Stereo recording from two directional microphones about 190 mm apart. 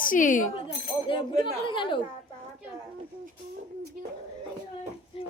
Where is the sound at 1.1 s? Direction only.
25° left (ahead or behind).